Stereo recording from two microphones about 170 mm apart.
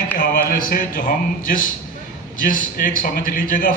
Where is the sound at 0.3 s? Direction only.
55° left (ahead or behind).